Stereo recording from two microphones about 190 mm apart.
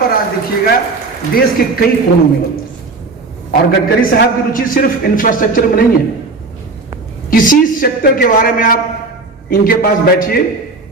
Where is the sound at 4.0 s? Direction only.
50° left (ahead or behind).